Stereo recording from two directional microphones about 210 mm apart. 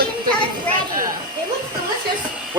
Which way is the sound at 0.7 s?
5° left (ahead or behind).